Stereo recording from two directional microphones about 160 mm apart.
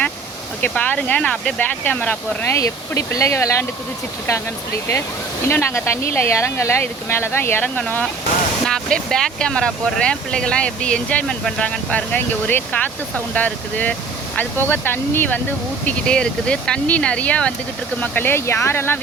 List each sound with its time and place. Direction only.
0.6 s speech: 10° left (ahead or behind)
5.5 s speech: 15° left (ahead or behind)